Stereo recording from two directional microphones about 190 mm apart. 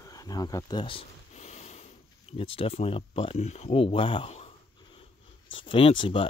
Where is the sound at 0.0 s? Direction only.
20° left (ahead or behind); by 1.9 s 35° left (ahead or behind).